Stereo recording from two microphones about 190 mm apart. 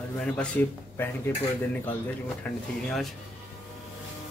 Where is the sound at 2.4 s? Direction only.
10° left (ahead or behind).